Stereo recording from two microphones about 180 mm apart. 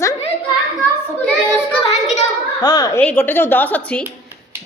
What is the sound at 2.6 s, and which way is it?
Speech, 20° left (ahead or behind).